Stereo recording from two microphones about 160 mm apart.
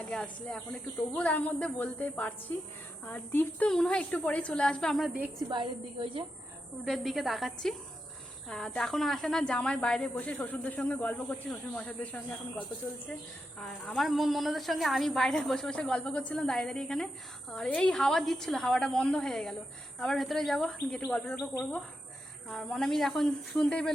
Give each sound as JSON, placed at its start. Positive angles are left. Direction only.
{"t": 0.1, "sound": "a woman's voice", "side_deg": 5}
{"t": 5.5, "sound": "a woman's voice", "side_deg": -30}
{"t": 6.8, "sound": "a woman's voice", "side_deg": 0}
{"t": 22.4, "sound": "a woman's voice", "side_deg": 5}